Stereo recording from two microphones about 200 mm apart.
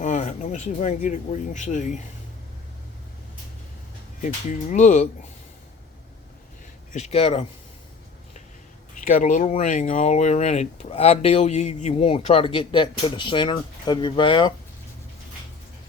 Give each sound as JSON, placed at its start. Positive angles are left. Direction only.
{"t": 0.0, "sound": "speech", "side_deg": 35}
{"t": 4.2, "sound": "speech", "side_deg": 40}
{"t": 6.9, "sound": "a man's voice", "side_deg": 30}
{"t": 9.0, "sound": "speech", "side_deg": 40}